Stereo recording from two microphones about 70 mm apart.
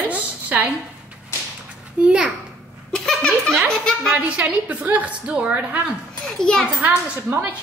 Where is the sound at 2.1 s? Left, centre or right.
Centre.